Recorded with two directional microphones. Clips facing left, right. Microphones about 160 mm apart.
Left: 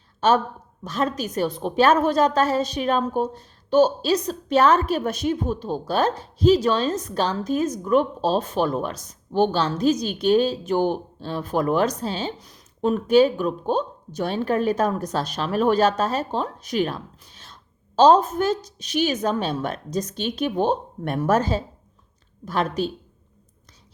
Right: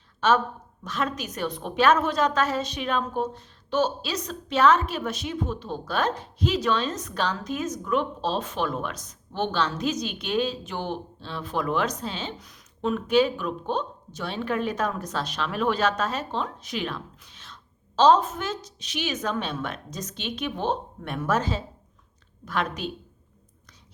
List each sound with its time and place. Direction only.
0.9 s a woman's voice: 35° left (ahead or behind)